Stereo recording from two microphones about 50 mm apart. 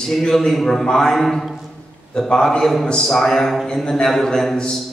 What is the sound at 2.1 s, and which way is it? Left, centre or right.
A man's voice, centre.